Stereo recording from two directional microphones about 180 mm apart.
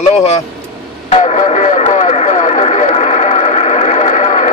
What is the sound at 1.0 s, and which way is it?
Radio, 35° left (ahead or behind).